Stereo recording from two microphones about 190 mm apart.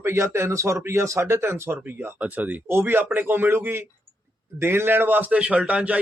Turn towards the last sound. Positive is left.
turn(degrees=-5)  # may be behind; listen again after turning